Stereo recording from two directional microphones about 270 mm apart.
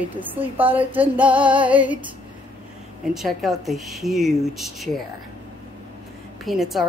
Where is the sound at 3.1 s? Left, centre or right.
Centre.